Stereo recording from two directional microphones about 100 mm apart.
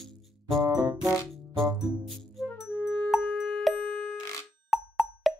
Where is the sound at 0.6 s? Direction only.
40° right (ahead or behind).